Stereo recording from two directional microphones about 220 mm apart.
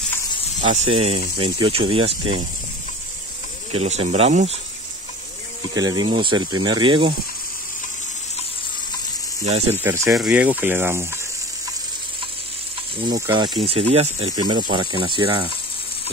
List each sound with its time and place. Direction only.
0.7 s speech: 30° right (ahead or behind)
3.7 s speech: 30° right (ahead or behind)
5.8 s speech: 20° right (ahead or behind)
9.4 s speech: 30° right (ahead or behind)
9.8 s speech: 10° right (ahead or behind)
13.0 s speech: 20° right (ahead or behind)